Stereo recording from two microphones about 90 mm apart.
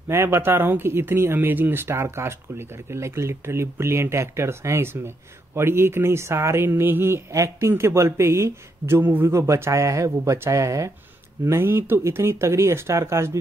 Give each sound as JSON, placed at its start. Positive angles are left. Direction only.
{"t": 0.1, "sound": "speech", "side_deg": -30}